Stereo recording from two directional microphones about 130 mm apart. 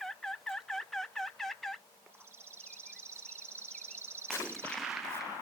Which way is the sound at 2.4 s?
20° right (ahead or behind).